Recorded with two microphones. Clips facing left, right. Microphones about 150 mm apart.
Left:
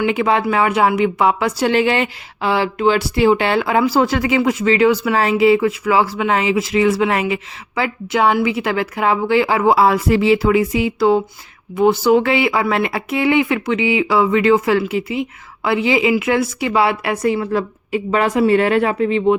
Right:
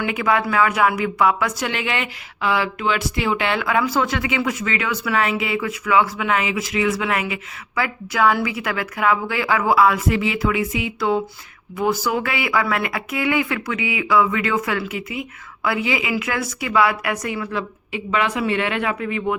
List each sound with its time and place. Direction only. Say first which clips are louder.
0.0 s speech: left 4 dB; 25° left (ahead or behind)